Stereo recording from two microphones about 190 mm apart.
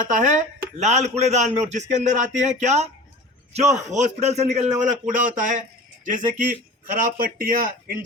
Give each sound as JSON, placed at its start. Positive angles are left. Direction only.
{"t": 0.1, "sound": "a man's voice", "side_deg": -40}